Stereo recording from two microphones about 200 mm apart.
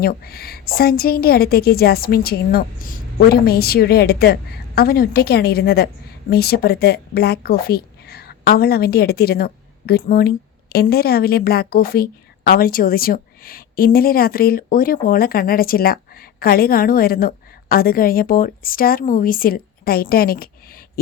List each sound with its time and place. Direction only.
0.0 s a woman's voice: 50° left (ahead or behind)